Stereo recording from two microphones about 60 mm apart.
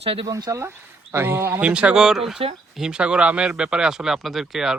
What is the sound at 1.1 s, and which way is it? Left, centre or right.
Speech, right.